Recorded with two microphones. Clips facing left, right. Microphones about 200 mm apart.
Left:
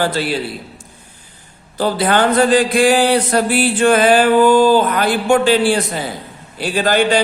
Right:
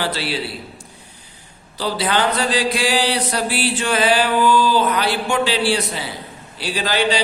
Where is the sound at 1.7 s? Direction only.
50° left (ahead or behind).